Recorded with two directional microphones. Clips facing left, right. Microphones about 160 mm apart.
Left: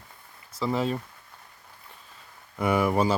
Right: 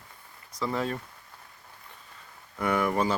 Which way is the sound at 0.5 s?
25° left (ahead or behind).